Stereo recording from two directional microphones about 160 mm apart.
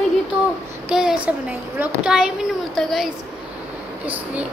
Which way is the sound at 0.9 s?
5° right (ahead or behind).